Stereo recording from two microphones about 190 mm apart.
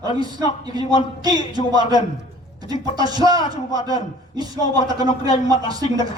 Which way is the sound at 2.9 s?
20° right (ahead or behind).